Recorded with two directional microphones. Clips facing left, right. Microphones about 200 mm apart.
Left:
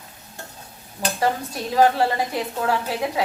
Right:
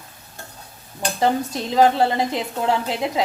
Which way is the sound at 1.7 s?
20° right (ahead or behind).